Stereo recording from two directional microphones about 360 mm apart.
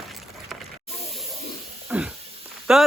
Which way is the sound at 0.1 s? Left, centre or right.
Centre.